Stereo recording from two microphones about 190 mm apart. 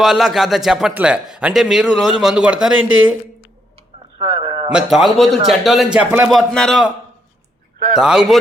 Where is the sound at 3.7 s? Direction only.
25° right (ahead or behind).